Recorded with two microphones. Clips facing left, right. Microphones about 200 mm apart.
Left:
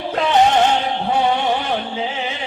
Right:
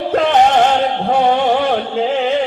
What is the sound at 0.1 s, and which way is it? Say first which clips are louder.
Music: right 3 dB; 55° right (ahead or behind).